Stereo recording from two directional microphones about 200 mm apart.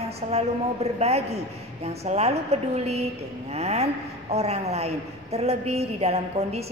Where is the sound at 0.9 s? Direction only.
30° right (ahead or behind).